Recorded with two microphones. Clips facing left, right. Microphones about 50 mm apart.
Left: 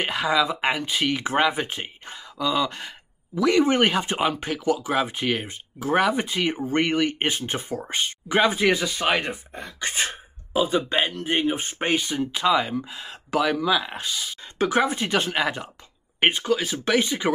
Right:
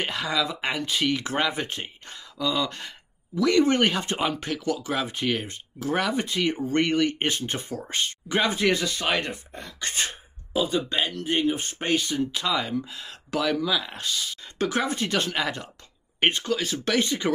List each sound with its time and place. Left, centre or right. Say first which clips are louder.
0.0 s speech: left 4 dB; centre